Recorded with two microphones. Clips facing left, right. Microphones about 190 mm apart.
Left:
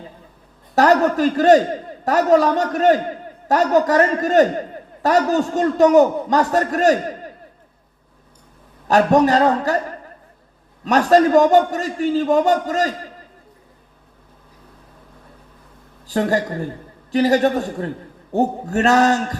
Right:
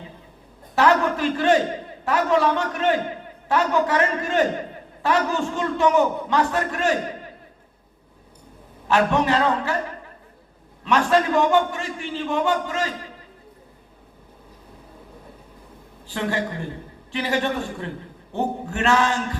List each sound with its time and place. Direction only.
0.8 s a man's voice: 40° left (ahead or behind)
8.9 s a man's voice: 40° left (ahead or behind)
10.8 s a man's voice: 40° left (ahead or behind)
16.0 s a man's voice: 40° left (ahead or behind)